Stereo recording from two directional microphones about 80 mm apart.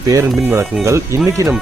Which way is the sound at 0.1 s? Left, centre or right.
Right.